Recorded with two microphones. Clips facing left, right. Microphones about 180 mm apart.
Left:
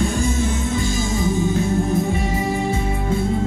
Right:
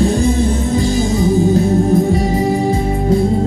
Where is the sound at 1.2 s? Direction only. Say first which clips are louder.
Right 7 dB; 35° right (ahead or behind).